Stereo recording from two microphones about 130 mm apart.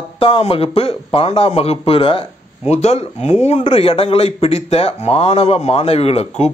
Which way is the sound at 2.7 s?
55° left (ahead or behind).